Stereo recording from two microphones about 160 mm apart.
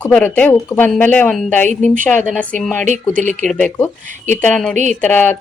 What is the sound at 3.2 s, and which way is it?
Speech, 50° right (ahead or behind).